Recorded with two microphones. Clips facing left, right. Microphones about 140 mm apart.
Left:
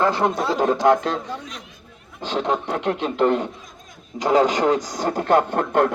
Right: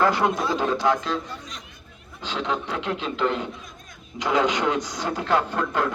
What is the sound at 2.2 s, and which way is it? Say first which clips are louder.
A man's voice: left 5 dB; 45° left (ahead or behind).